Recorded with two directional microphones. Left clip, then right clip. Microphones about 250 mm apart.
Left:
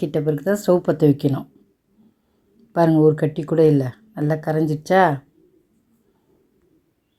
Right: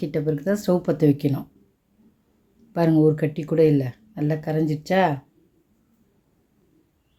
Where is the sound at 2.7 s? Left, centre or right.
Centre.